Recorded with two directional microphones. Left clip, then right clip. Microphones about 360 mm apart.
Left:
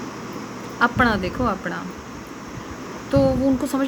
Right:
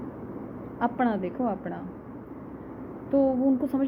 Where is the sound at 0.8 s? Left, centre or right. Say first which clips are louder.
Left 8 dB; centre.